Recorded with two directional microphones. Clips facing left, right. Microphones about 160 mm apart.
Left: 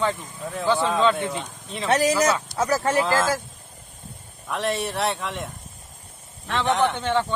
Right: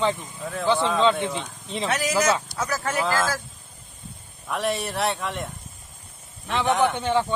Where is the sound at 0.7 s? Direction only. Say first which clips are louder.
Left 1 dB; 5° left (ahead or behind).